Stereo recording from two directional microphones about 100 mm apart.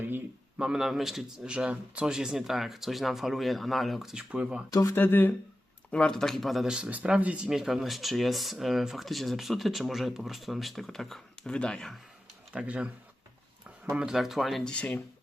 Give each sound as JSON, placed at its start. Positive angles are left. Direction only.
{"t": 0.6, "sound": "speech", "side_deg": -5}
{"t": 4.7, "sound": "speech", "side_deg": 35}
{"t": 4.9, "sound": "speech", "side_deg": 20}
{"t": 5.9, "sound": "speech", "side_deg": 10}
{"t": 12.5, "sound": "speech", "side_deg": -15}